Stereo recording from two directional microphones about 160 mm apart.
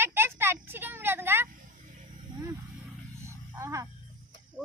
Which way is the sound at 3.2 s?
15° right (ahead or behind).